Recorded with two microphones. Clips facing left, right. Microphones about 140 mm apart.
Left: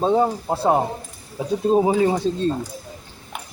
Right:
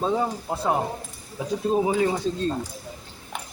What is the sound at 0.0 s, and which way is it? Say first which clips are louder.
Speech: left 6 dB; 30° left (ahead or behind).